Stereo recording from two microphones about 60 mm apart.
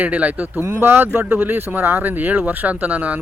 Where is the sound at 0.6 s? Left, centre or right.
Right.